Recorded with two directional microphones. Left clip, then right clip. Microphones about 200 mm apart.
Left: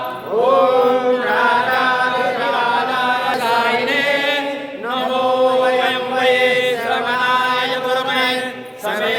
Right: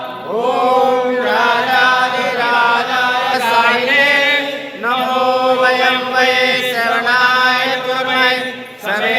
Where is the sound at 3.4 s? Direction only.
60° left (ahead or behind).